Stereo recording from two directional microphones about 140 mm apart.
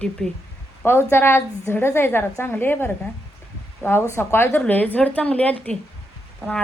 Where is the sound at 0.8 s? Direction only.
15° left (ahead or behind).